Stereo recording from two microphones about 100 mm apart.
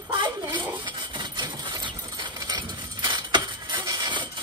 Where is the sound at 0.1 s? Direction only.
50° right (ahead or behind).